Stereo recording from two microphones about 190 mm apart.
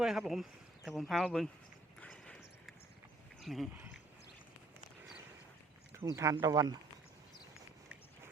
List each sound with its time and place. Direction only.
0.0 s speech: centre (ahead or behind)
2.0 s a sound: 5° left (ahead or behind)
3.4 s speech: centre (ahead or behind)
6.0 s speech: 15° right (ahead or behind)